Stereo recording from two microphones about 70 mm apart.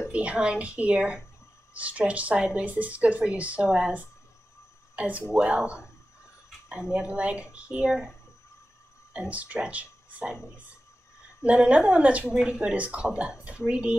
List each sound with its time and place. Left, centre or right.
0.1 s speech: centre
9.1 s speech: centre
11.4 s speech: centre